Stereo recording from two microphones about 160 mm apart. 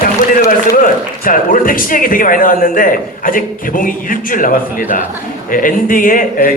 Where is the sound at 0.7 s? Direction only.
60° left (ahead or behind).